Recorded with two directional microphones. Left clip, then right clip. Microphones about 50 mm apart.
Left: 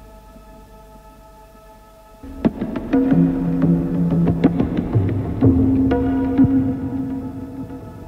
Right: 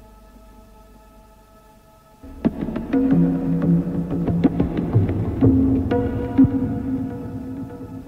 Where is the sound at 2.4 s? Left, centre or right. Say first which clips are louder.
Left 2 dB; left.